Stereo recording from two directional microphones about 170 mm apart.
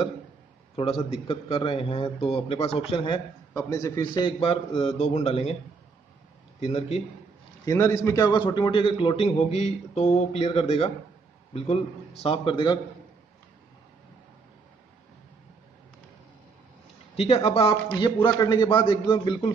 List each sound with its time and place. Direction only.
0.7 s a man's voice: 35° left (ahead or behind)
3.5 s a man's voice: 20° left (ahead or behind); by 5.6 s 40° left (ahead or behind)
6.6 s a man's voice: 35° left (ahead or behind)
7.6 s a man's voice: 15° left (ahead or behind)
17.2 s a man's voice: 35° left (ahead or behind)